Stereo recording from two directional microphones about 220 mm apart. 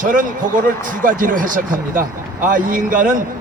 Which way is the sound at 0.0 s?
35° right (ahead or behind).